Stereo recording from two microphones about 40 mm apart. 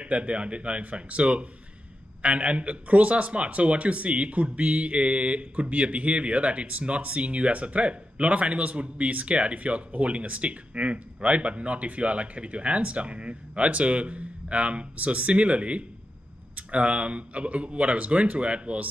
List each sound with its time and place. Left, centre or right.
0.0 s a man's voice: right